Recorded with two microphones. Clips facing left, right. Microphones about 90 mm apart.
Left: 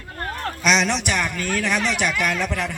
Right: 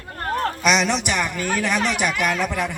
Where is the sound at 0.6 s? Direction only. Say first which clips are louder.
Left 2 dB; 5° right (ahead or behind).